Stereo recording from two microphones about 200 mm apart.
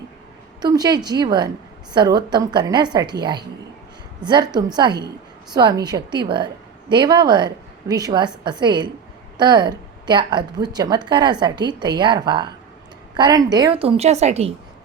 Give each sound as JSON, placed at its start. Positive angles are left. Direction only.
{"t": 0.6, "sound": "a woman's voice", "side_deg": -20}